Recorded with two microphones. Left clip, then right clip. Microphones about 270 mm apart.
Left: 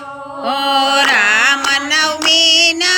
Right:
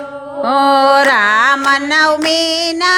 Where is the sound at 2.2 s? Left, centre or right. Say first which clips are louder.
Left 4 dB; right.